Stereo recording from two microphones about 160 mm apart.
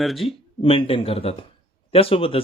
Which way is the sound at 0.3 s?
35° left (ahead or behind).